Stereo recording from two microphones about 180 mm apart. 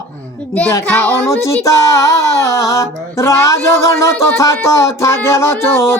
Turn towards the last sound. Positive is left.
turn(degrees=15)  # may be behind; listen again after turning